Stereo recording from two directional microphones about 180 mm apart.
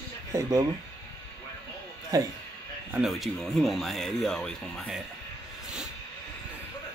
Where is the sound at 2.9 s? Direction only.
Centre (ahead or behind).